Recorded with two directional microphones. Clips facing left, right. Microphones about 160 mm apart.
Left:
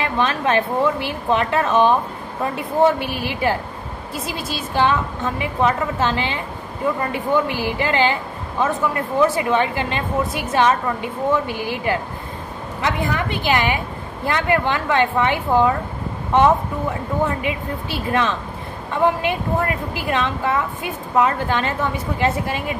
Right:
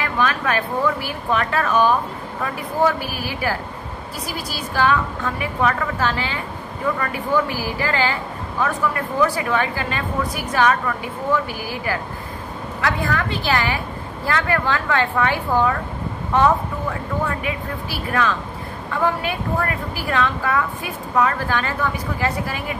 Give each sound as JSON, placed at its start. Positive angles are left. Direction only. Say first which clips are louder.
{"t": 0.0, "sound": "a woman's voice", "louder": "left 1 dB", "side_deg": 25}